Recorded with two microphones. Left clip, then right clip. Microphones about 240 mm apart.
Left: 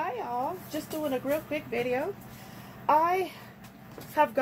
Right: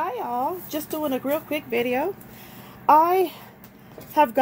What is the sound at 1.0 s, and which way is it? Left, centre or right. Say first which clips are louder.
Speech: right 4 dB; right.